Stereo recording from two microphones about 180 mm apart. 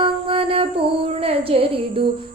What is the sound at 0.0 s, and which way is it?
Mantra, 30° right (ahead or behind).